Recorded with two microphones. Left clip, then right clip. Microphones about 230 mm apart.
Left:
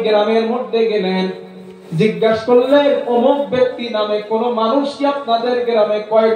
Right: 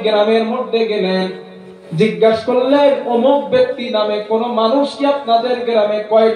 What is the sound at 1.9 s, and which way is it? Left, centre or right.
Speech, right.